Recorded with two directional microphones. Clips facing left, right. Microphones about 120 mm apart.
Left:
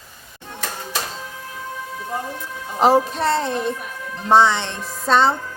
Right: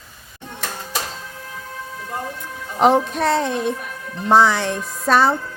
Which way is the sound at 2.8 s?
Centre (ahead or behind).